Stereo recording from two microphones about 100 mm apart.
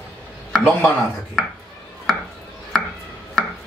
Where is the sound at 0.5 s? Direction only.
Centre (ahead or behind).